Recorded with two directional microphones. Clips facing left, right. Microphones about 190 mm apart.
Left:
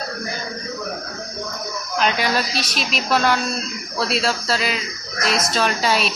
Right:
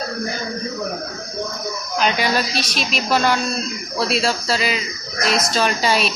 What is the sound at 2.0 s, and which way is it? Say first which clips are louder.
A woman's voice: right 1 dB; centre (ahead or behind).